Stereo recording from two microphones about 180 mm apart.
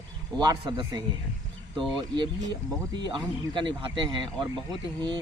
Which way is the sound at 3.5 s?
30° right (ahead or behind).